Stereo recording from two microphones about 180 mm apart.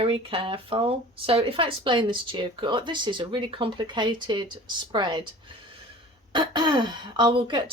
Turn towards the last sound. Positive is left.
turn(degrees=-25)  # may be behind; listen again after turning